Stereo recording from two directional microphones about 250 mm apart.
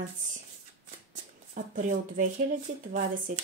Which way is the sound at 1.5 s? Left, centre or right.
Right.